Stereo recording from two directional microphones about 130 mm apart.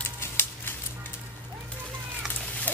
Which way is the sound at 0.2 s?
15° left (ahead or behind).